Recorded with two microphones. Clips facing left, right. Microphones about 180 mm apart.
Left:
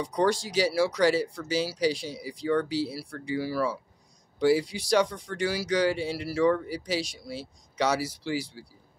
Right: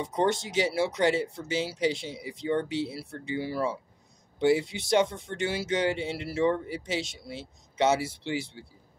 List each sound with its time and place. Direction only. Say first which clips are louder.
0.0 s speech: left 1 dB; 25° right (ahead or behind)